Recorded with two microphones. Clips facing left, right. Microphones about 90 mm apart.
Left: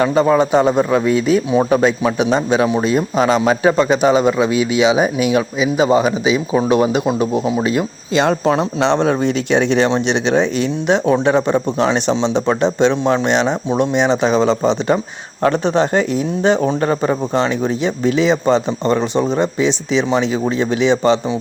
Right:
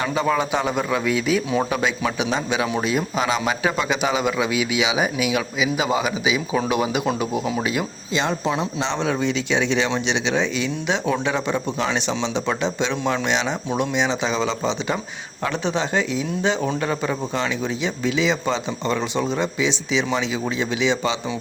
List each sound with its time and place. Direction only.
0.3 s speech: 40° left (ahead or behind)
8.1 s speech: 65° left (ahead or behind)
8.4 s speech: 50° left (ahead or behind)